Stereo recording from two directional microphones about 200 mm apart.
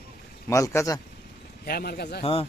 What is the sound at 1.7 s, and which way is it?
Speech, 50° left (ahead or behind).